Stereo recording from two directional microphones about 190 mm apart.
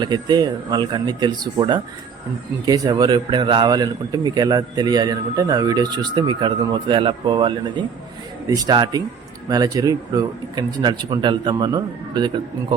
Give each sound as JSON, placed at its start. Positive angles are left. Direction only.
{"t": 0.0, "sound": "a man's voice", "side_deg": -25}